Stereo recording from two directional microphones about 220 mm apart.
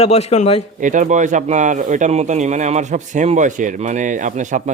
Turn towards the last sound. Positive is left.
turn(degrees=-35)  # may be behind; listen again after turning